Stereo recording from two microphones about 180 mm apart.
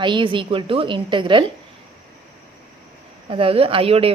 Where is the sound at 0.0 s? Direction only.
25° right (ahead or behind).